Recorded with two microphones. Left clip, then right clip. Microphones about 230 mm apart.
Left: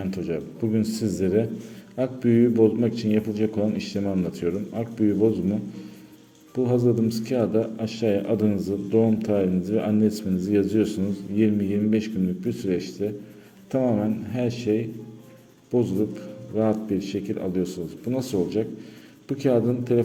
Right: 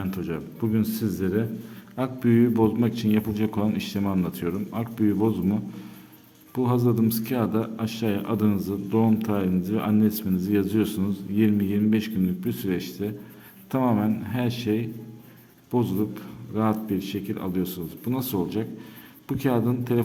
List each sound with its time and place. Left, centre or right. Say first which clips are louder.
0.1 s a man's voice: left 3 dB; centre
6.7 s a man's voice: left 2 dB; right